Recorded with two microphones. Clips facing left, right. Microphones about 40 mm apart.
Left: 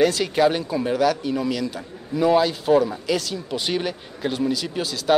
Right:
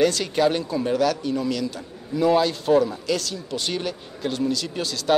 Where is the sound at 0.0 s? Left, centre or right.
Centre.